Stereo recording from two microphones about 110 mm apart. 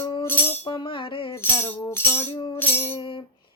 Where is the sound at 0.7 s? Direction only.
45° left (ahead or behind).